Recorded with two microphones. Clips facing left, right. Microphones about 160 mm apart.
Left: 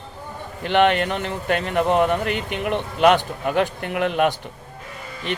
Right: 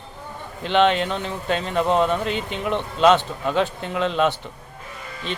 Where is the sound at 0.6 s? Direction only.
55° left (ahead or behind).